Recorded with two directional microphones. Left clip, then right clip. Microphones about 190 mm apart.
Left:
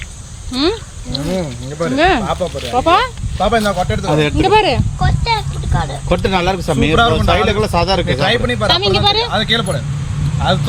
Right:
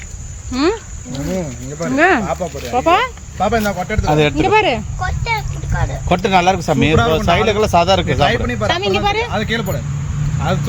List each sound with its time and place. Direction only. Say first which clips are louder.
0.5 s speech: even; 15° right (ahead or behind)
1.3 s speech: even; 5° left (ahead or behind)
2.0 s speech: even; 10° right (ahead or behind)
4.1 s speech: right 2 dB; 50° right (ahead or behind)
4.4 s speech: left 2 dB; centre (ahead or behind)
6.1 s speech: right 3 dB; 45° right (ahead or behind)
8.0 s speech: left 1 dB; centre (ahead or behind)